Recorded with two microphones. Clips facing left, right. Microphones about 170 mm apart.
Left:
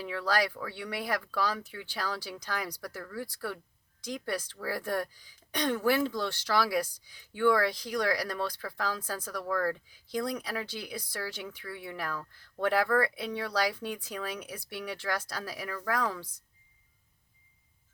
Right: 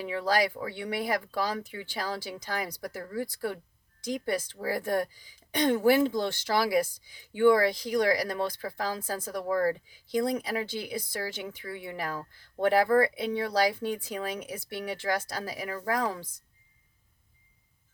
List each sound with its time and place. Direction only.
0.0 s a woman's voice: 20° right (ahead or behind)